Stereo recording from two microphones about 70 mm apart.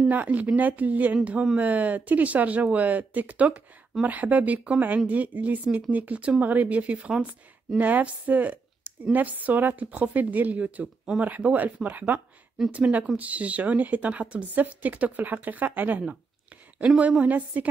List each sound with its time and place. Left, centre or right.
0.1 s speech: right
17.2 s speech: right